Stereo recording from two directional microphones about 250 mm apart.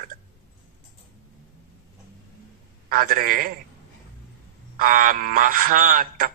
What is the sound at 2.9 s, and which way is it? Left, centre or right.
Speech, right.